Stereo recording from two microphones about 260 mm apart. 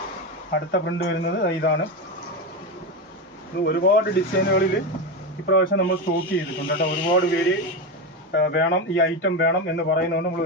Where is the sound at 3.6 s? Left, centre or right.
Left.